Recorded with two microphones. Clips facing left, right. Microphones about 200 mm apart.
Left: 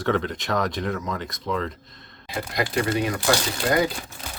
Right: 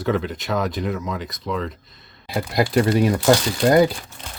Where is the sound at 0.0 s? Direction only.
5° right (ahead or behind).